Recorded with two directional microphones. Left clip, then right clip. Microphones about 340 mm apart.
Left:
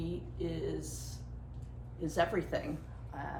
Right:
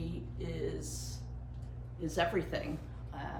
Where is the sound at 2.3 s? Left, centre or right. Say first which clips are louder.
Even; centre.